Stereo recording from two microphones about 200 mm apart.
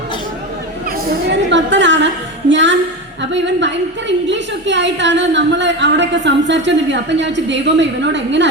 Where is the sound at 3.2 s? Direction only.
65° right (ahead or behind).